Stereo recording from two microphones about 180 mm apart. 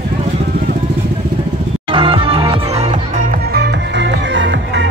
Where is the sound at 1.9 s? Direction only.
30° right (ahead or behind).